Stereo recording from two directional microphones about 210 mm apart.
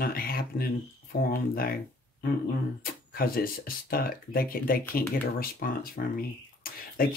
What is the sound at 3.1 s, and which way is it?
Speech, 45° left (ahead or behind).